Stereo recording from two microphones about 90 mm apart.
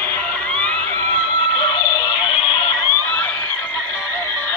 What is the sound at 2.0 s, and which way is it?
Music, 50° left (ahead or behind).